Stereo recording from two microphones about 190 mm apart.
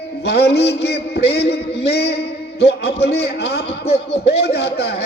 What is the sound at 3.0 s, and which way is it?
A man's voice, 60° left (ahead or behind).